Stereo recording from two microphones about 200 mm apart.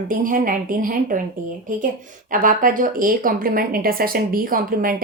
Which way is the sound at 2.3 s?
40° right (ahead or behind).